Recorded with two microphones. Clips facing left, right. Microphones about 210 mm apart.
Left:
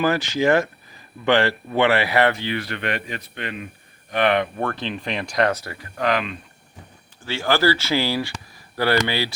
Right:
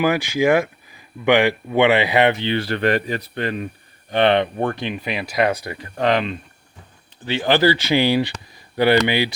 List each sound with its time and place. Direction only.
0.0 s speech: 15° right (ahead or behind); by 3.7 s 40° right (ahead or behind)
4.1 s speech: 30° right (ahead or behind)